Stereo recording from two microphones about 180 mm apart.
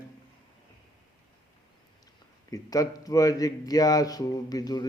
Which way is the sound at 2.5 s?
20° left (ahead or behind).